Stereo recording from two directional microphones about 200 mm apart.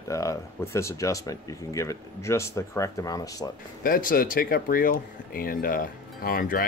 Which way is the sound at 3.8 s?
45° left (ahead or behind).